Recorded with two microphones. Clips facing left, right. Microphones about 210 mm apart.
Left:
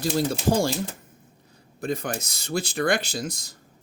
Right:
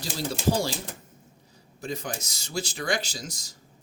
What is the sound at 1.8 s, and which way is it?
Speech, 55° left (ahead or behind).